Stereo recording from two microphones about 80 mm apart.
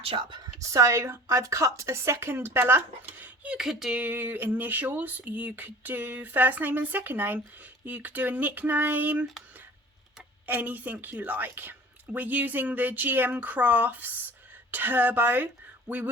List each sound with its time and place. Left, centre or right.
0.2 s a woman's voice: right
0.7 s a woman's voice: right; by 3.6 s centre
3.6 s speech: centre
4.0 s speech: right
10.4 s speech: right